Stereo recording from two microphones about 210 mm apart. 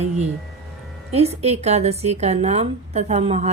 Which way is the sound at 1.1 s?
30° right (ahead or behind).